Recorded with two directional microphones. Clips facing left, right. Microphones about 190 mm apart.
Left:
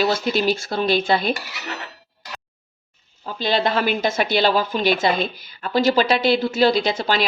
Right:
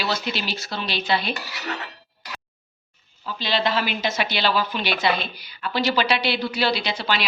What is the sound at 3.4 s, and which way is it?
Speech, 50° left (ahead or behind).